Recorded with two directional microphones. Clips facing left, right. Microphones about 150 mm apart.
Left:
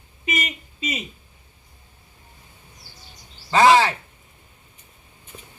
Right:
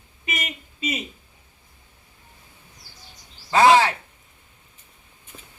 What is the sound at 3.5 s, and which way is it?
Speech, 10° right (ahead or behind).